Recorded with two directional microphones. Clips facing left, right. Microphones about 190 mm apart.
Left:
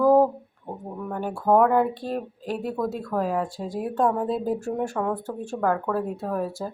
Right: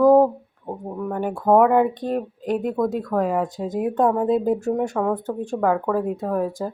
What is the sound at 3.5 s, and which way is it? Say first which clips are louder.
Speech: right 5 dB; 20° right (ahead or behind).